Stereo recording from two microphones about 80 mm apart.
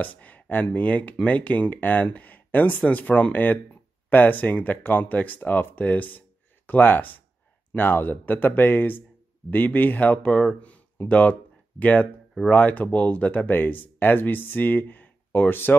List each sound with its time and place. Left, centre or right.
0.0 s speech: centre